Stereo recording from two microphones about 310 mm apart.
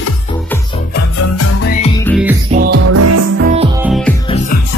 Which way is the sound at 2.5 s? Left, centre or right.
Right.